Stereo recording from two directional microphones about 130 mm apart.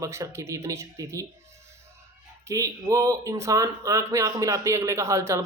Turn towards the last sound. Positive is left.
turn(degrees=-20)  # may be behind; listen again after turning